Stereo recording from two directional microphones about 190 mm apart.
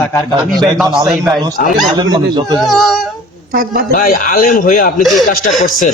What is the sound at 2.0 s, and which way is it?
Speech, 20° right (ahead or behind).